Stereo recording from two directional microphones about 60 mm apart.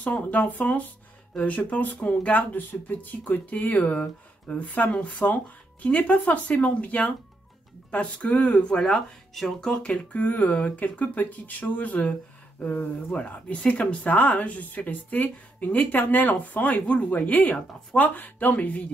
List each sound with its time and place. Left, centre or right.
0.0 s speech: left; by 9.7 s centre
9.7 s speech: centre